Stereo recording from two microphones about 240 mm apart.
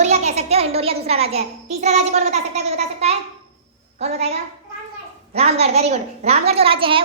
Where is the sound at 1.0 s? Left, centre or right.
Right.